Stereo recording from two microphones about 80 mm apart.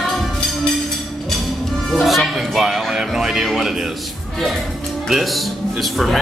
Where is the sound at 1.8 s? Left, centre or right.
Centre.